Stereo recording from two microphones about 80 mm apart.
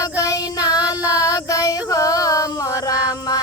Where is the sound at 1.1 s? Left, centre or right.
Left.